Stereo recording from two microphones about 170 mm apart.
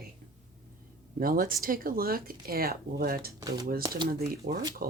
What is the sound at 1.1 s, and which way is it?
Speech, 55° right (ahead or behind).